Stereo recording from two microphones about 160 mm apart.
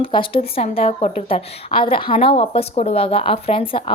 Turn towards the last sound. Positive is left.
turn(degrees=35)  # may be behind; listen again after turning